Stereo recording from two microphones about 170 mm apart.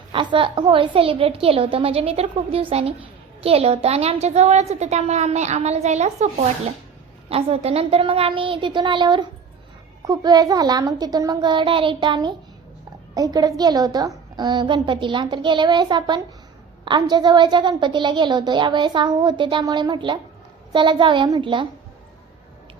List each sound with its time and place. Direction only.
0.1 s a woman's voice: 30° right (ahead or behind)